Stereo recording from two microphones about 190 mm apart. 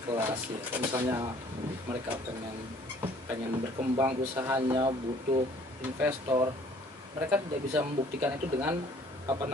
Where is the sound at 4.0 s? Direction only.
15° right (ahead or behind).